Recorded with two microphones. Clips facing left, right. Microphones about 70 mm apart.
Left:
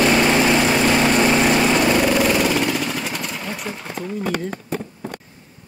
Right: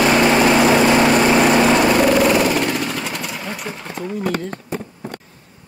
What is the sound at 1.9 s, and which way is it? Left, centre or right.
Vehicle, centre.